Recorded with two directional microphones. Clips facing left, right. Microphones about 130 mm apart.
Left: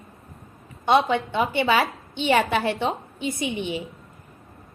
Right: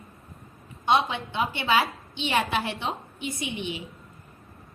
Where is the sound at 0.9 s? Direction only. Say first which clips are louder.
Left 4 dB; 55° left (ahead or behind).